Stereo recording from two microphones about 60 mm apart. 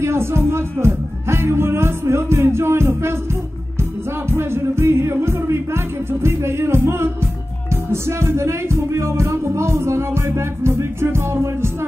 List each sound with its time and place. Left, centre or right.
0.0 s music: right
4.3 s music: right